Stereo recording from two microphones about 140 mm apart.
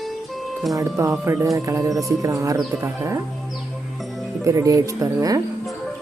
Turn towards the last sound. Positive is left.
turn(degrees=-25)  # may be behind; listen again after turning